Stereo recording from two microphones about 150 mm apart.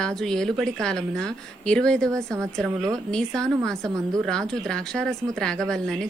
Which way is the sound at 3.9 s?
20° right (ahead or behind).